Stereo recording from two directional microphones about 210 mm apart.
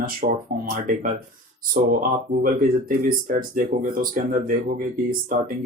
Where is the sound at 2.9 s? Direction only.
45° right (ahead or behind).